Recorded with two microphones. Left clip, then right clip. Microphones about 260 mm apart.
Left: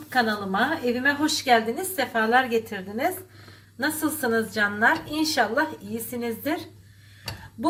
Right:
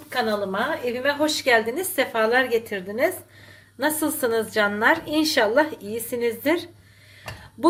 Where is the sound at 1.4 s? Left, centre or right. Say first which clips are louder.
Even; right.